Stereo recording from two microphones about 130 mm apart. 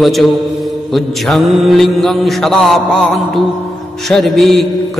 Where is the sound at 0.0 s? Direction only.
Centre (ahead or behind).